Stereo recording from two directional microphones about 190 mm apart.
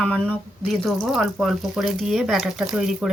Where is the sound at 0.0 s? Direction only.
5° left (ahead or behind).